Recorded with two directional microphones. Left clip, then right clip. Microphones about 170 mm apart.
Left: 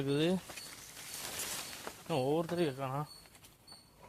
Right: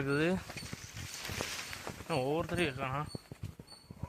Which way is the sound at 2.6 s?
35° left (ahead or behind).